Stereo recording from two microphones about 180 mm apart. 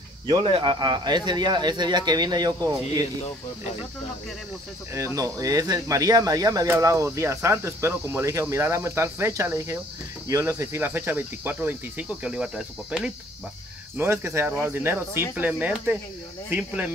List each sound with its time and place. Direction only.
0.4 s speech: 30° right (ahead or behind)
4.9 s speech: 15° right (ahead or behind)